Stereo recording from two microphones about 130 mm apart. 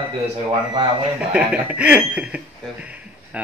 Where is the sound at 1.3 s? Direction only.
10° right (ahead or behind).